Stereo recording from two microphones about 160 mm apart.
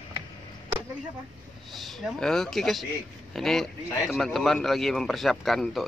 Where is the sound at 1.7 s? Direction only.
Centre (ahead or behind).